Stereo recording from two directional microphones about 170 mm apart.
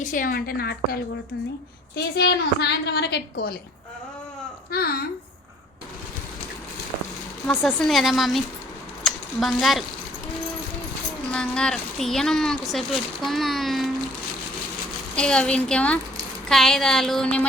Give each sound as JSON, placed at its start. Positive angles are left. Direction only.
{"t": 0.0, "sound": "a woman's voice", "side_deg": 50}
{"t": 2.1, "sound": "a woman's voice", "side_deg": 80}
{"t": 4.7, "sound": "a woman's voice", "side_deg": 65}
{"t": 7.6, "sound": "speech", "side_deg": 0}
{"t": 11.3, "sound": "speech", "side_deg": 5}
{"t": 15.1, "sound": "speech", "side_deg": 5}